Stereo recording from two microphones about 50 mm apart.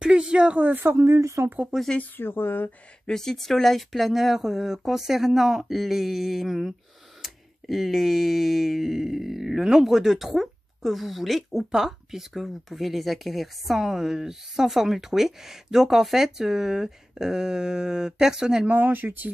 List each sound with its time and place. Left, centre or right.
0.0 s a sound: centre
0.6 s speech: right
1.0 s speech: right
1.7 s speech: centre
2.1 s speech: left
3.1 s speech: centre
18.7 s speech: right